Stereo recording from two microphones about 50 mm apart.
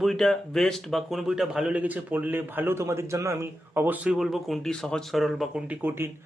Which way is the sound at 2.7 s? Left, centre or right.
Right.